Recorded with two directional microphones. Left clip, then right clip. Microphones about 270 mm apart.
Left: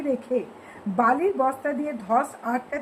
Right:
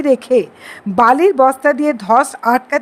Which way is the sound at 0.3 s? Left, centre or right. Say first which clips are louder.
Right 13 dB; right.